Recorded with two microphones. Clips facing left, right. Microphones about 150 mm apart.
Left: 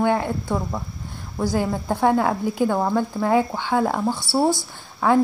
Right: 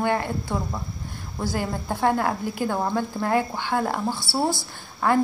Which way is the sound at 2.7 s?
5° left (ahead or behind).